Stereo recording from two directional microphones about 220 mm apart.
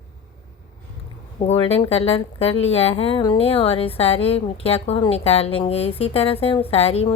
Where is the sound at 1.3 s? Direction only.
25° left (ahead or behind).